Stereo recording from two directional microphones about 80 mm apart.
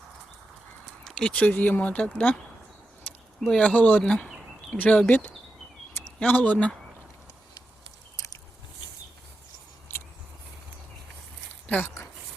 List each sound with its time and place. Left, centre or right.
1.0 s speech: centre
3.4 s speech: centre